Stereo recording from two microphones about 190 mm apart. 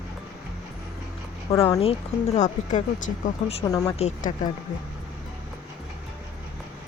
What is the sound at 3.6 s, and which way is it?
Speech, 15° left (ahead or behind).